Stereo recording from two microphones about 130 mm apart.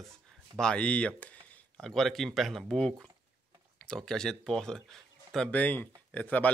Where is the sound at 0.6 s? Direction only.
10° left (ahead or behind).